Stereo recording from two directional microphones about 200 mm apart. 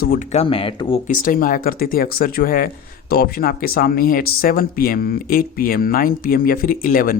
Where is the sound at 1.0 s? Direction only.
45° left (ahead or behind).